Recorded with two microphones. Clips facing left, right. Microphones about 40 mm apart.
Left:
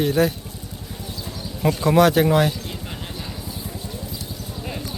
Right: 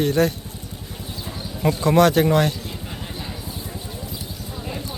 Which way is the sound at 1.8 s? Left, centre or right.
Centre.